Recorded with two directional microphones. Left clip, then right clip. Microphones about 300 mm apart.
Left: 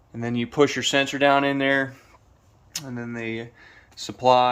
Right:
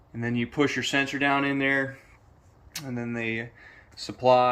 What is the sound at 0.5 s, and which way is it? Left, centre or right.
Speech, centre.